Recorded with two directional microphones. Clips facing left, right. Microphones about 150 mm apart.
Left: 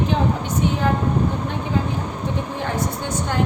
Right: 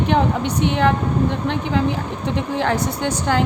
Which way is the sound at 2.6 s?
90° right.